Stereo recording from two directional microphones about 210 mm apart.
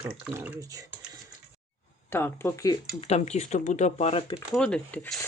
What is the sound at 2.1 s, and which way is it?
Speech, 10° left (ahead or behind).